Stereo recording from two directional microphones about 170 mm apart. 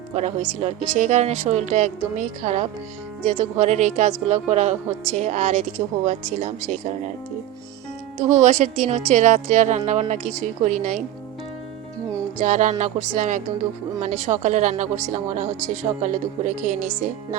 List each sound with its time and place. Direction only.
0.1 s a woman's voice: 40° right (ahead or behind)
8.3 s a woman's voice: 45° right (ahead or behind)
12.5 s a woman's voice: 45° right (ahead or behind)